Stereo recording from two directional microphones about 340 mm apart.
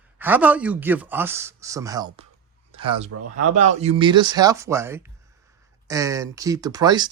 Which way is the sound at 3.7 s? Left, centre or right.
Centre.